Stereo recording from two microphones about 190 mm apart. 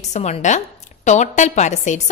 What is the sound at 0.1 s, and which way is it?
A woman's voice, 35° left (ahead or behind).